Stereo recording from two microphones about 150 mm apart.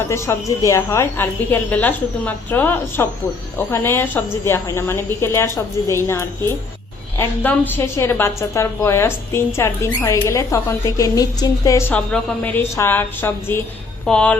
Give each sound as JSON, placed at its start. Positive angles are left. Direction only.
{"t": 0.1, "sound": "a woman's voice", "side_deg": 20}